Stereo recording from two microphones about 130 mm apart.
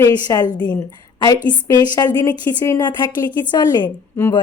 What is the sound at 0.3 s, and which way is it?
Speech, 25° left (ahead or behind).